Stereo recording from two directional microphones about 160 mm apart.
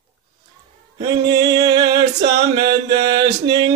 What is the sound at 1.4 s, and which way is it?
Music, 25° right (ahead or behind).